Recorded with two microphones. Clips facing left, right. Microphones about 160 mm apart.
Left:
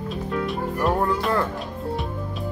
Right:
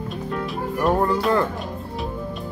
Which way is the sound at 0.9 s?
Centre (ahead or behind).